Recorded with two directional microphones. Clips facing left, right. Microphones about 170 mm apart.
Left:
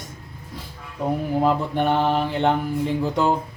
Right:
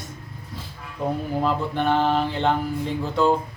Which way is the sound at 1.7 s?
15° left (ahead or behind).